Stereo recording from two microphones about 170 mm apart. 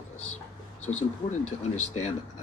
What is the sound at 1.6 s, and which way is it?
Speech, 40° left (ahead or behind).